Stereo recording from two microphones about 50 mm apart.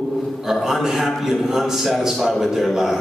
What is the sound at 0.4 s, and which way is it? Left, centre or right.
A man's voice, centre.